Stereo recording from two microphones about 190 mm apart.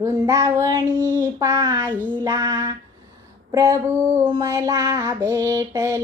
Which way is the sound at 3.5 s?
20° right (ahead or behind).